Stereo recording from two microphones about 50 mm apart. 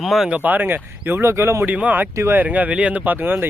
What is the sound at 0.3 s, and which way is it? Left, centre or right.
Speech, right.